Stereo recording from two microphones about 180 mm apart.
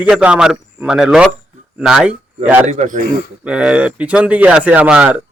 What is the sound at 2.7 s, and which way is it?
Speech, 45° right (ahead or behind).